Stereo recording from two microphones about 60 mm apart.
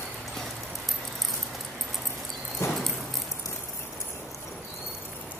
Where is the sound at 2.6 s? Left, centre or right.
Left.